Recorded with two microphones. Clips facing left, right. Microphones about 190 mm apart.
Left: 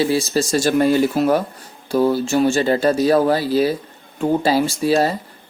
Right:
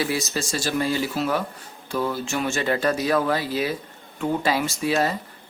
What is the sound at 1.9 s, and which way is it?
Speech, 35° left (ahead or behind).